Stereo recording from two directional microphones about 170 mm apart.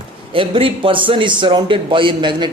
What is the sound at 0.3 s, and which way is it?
A man's voice, 30° right (ahead or behind).